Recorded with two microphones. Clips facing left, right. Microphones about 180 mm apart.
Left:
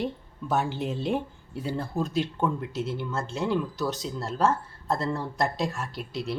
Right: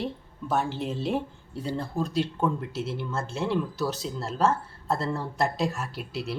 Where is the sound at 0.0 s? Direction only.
Centre (ahead or behind).